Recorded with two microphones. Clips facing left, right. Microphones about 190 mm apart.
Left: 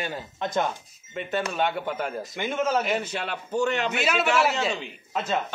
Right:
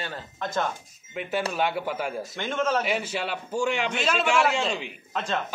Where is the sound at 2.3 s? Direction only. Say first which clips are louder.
Left 1 dB; 10° left (ahead or behind).